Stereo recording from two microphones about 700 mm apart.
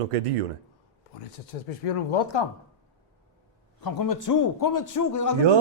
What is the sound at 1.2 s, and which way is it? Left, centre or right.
Speech, left.